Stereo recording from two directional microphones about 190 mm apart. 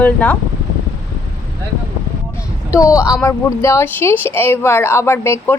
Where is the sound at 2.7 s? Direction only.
15° left (ahead or behind).